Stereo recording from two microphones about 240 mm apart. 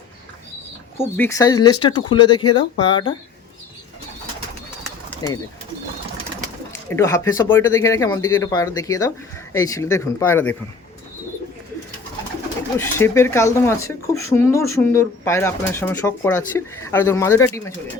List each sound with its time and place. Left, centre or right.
0.9 s speech: centre
5.2 s speech: centre
6.9 s speech: centre
13.0 s speech: centre